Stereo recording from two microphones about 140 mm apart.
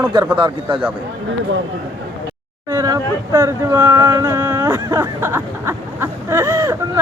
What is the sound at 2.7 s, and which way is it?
Speech, 25° right (ahead or behind).